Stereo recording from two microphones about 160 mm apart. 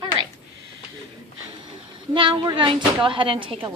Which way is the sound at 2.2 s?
30° right (ahead or behind).